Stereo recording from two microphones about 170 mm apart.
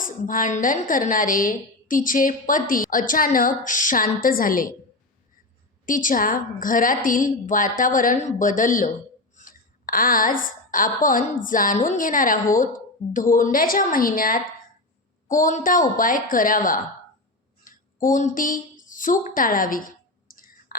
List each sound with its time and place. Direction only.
0.0 s a woman's voice: 55° left (ahead or behind)
5.8 s a woman's voice: 50° left (ahead or behind)
20.2 s clicking: 55° left (ahead or behind)